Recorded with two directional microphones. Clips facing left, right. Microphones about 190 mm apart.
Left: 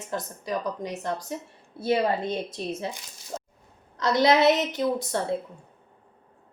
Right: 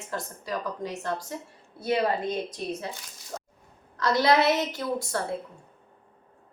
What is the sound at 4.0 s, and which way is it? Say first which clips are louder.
A woman's voice: left 2 dB; 20° left (ahead or behind).